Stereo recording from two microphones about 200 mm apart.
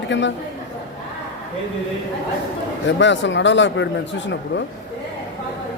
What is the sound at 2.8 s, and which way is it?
Speech, 65° left (ahead or behind).